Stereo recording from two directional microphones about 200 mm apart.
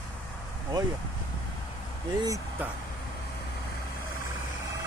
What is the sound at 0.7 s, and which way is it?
Speech, 20° right (ahead or behind).